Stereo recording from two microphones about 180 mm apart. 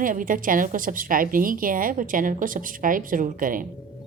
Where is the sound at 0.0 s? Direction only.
50° right (ahead or behind).